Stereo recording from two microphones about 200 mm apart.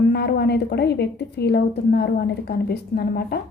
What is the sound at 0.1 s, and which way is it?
A woman's voice, 55° left (ahead or behind).